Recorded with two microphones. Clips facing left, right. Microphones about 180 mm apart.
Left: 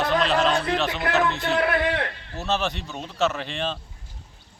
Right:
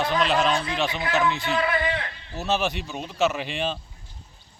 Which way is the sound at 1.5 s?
60° left (ahead or behind).